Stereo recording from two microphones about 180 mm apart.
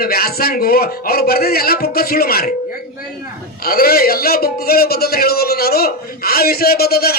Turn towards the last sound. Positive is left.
turn(degrees=60)  # may be behind; listen again after turning